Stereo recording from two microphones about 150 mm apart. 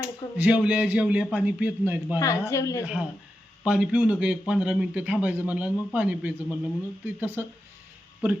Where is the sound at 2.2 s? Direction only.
20° left (ahead or behind).